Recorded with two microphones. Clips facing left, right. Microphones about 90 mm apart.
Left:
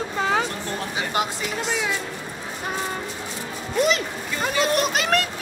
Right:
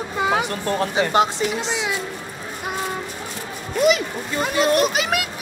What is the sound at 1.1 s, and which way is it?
Speech, 25° right (ahead or behind).